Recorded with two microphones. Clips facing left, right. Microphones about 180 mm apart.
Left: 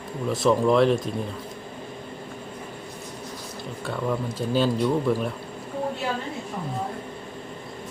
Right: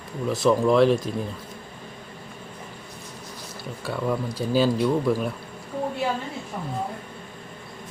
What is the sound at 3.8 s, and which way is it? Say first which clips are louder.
Speech: right 1 dB; 5° right (ahead or behind).